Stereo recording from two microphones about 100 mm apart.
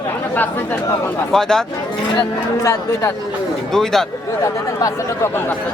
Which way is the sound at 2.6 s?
30° left (ahead or behind).